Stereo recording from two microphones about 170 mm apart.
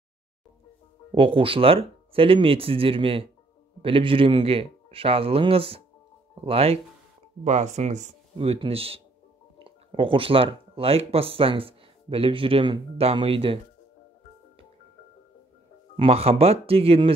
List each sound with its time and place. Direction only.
1.1 s speech: 30° right (ahead or behind)
16.0 s speech: 35° right (ahead or behind)